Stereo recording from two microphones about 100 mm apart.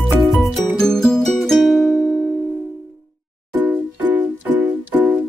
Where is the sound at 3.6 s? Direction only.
20° right (ahead or behind).